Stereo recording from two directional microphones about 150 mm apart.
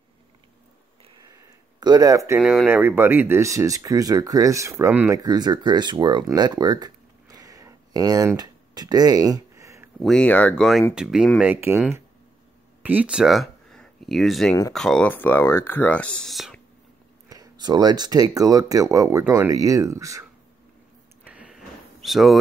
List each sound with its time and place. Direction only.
1.3 s a sound: 25° right (ahead or behind)
2.4 s speech: 5° right (ahead or behind)
5.2 s speech: 25° right (ahead or behind)
9.9 s speech: 5° left (ahead or behind); by 11.8 s 15° right (ahead or behind)
12.8 s speech: 10° right (ahead or behind)
17.3 s speech: 25° right (ahead or behind)
21.2 s a sound: 10° right (ahead or behind)